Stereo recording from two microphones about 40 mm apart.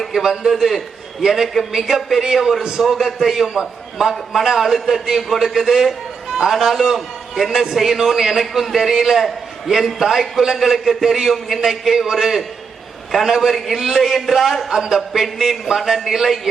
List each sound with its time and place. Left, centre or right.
0.1 s a man's voice: centre
6.6 s a man's voice: centre